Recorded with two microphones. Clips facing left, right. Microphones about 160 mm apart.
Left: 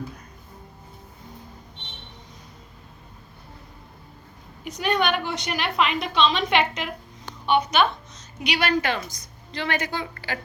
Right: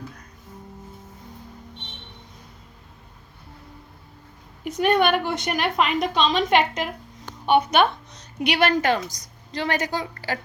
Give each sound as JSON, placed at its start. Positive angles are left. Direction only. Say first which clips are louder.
{"t": 4.6, "sound": "a woman's voice", "louder": "right 4 dB", "side_deg": -50}